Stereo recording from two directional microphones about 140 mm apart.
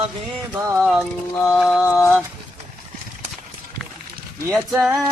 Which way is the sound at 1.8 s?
20° left (ahead or behind).